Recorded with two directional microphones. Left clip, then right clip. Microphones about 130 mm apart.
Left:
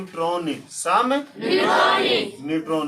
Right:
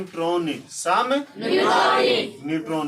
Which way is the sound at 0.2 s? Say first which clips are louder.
Even; 35° left (ahead or behind).